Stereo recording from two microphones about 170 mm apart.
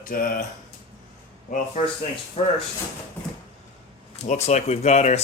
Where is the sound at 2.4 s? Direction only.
35° left (ahead or behind).